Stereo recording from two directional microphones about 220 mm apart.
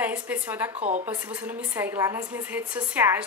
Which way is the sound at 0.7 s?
35° right (ahead or behind).